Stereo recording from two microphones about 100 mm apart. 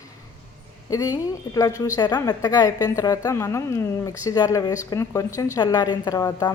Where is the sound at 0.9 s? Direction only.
35° left (ahead or behind).